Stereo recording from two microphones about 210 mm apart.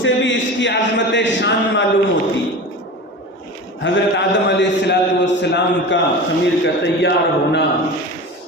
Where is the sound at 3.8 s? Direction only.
60° left (ahead or behind).